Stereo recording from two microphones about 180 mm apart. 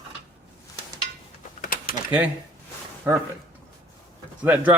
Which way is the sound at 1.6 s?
55° left (ahead or behind).